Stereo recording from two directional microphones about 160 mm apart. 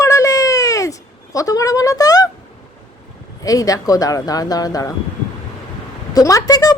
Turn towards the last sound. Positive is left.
turn(degrees=25)  # may be behind; listen again after turning